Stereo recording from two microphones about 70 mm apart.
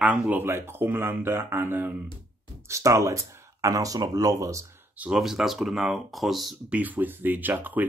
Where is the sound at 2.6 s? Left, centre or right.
Right.